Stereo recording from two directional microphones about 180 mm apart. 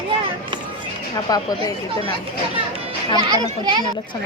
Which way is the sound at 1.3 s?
20° left (ahead or behind).